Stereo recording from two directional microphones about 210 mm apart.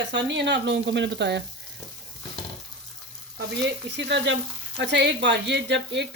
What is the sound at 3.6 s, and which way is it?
Speech, 55° right (ahead or behind).